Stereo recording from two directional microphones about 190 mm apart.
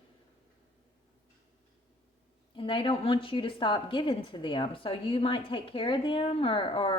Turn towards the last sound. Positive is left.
turn(degrees=25)  # may be behind; listen again after turning